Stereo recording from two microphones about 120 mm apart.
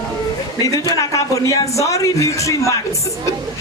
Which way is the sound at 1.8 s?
25° left (ahead or behind).